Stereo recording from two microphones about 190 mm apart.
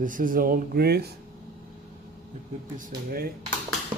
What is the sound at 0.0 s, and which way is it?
Speech, 45° right (ahead or behind).